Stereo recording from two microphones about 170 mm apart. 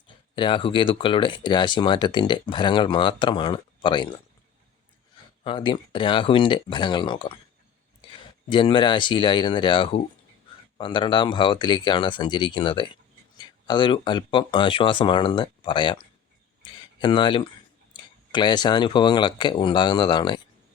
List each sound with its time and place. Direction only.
0.3 s speech: 30° left (ahead or behind)
5.4 s speech: 30° left (ahead or behind)
8.4 s speech: 30° left (ahead or behind)
16.6 s a sound: 25° left (ahead or behind)
17.9 s speech: 25° left (ahead or behind)